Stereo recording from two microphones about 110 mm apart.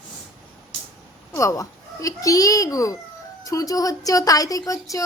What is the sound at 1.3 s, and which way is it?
A child's voice, 30° left (ahead or behind).